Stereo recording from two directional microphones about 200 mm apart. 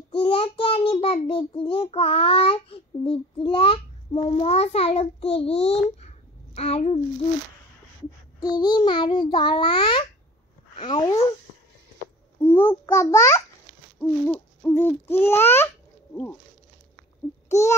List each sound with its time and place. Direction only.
0.1 s a child's voice: 30° left (ahead or behind)
8.4 s a child's voice: 20° left (ahead or behind)
12.4 s hoot: 10° left (ahead or behind)
17.5 s a sound: 15° left (ahead or behind)